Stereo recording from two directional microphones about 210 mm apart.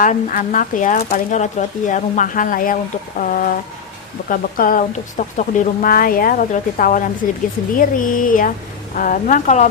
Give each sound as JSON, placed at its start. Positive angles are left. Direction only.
{"t": 0.0, "sound": "speech", "side_deg": 40}